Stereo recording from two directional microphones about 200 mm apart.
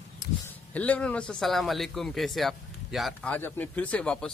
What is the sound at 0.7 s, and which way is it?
A man's voice, 5° left (ahead or behind).